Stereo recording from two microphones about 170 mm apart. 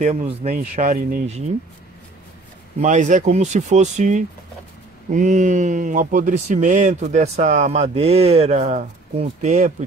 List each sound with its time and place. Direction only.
0.0 s speech: 45° right (ahead or behind)
2.8 s speech: 45° right (ahead or behind)